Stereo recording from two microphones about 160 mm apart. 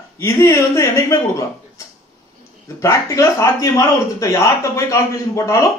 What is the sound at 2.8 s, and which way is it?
A man's voice, 20° left (ahead or behind).